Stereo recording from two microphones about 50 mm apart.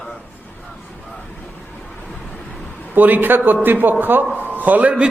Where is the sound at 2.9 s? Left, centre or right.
Right.